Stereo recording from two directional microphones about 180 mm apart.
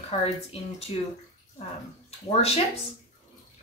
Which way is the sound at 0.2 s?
35° left (ahead or behind).